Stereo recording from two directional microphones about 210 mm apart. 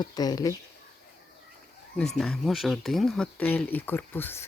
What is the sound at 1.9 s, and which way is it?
Speech, centre (ahead or behind).